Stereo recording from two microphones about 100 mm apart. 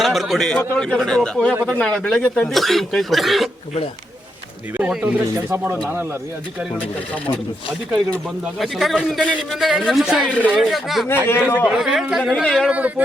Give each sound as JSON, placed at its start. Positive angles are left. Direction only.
{"t": 0.0, "sound": "a man's voice", "side_deg": 0}
{"t": 4.8, "sound": "speech", "side_deg": -10}
{"t": 8.5, "sound": "speech", "side_deg": 0}
{"t": 10.2, "sound": "speech", "side_deg": 15}
{"t": 10.5, "sound": "speech", "side_deg": 0}
{"t": 11.3, "sound": "a man's voice", "side_deg": 20}
{"t": 11.8, "sound": "speech", "side_deg": -5}
{"t": 12.6, "sound": "speech", "side_deg": -15}